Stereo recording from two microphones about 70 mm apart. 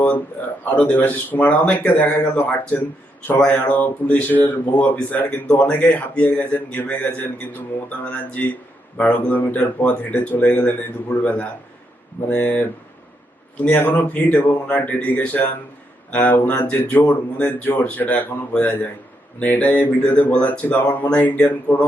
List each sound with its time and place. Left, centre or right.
0.6 s speech: left